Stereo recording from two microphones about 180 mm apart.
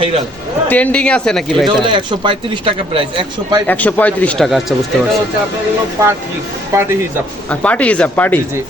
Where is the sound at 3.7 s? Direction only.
10° left (ahead or behind).